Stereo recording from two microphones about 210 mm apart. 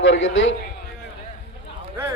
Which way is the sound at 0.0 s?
65° left (ahead or behind).